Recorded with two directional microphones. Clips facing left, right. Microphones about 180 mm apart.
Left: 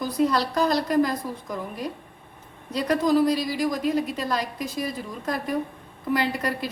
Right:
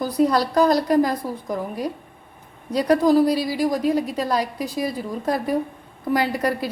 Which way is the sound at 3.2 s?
10° right (ahead or behind).